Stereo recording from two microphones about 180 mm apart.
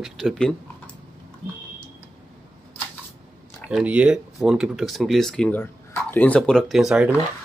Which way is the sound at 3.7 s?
5° right (ahead or behind).